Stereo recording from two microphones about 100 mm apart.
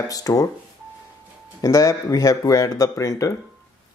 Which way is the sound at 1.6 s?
35° left (ahead or behind).